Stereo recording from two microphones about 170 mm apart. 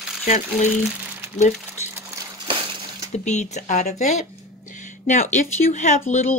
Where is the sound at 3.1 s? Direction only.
40° left (ahead or behind).